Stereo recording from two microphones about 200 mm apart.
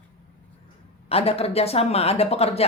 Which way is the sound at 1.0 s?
30° left (ahead or behind).